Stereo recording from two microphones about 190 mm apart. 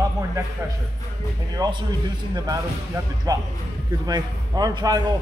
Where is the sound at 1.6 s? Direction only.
20° right (ahead or behind).